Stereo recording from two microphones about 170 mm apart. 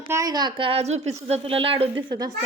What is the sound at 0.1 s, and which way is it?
A woman's voice, 20° right (ahead or behind).